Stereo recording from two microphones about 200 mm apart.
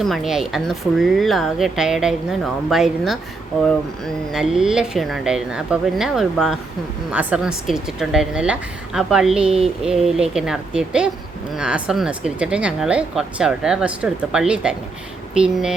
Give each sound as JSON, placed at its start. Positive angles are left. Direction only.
{"t": 0.0, "sound": "a woman's voice", "side_deg": 0}